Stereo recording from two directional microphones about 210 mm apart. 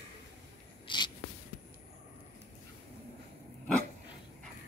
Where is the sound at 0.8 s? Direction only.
20° left (ahead or behind).